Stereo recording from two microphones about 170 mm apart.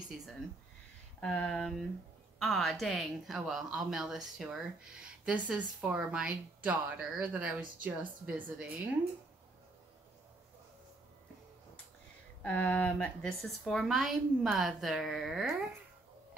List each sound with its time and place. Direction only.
1.2 s a woman's voice: 5° left (ahead or behind)
12.4 s a woman's voice: 10° left (ahead or behind)